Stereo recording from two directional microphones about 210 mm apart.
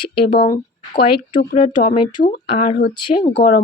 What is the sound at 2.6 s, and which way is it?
Speech, 45° left (ahead or behind).